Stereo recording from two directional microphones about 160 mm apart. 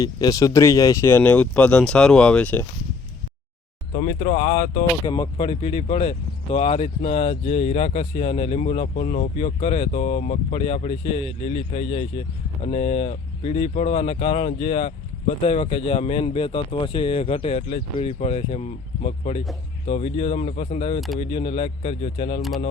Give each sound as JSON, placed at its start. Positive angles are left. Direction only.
{"t": 0.0, "sound": "speech", "side_deg": 20}
{"t": 3.9, "sound": "speech", "side_deg": 45}
{"t": 5.0, "sound": "speech", "side_deg": 30}
{"t": 22.4, "sound": "speech", "side_deg": 0}